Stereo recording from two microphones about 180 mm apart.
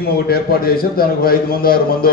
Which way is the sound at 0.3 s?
55° left (ahead or behind).